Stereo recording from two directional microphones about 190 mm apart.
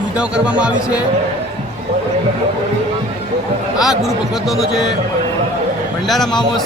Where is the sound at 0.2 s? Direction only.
5° right (ahead or behind).